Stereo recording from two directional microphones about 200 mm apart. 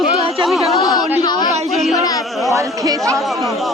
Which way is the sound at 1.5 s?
35° right (ahead or behind).